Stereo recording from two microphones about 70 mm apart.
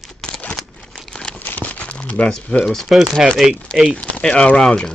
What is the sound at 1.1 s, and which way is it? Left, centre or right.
Crumpling, centre.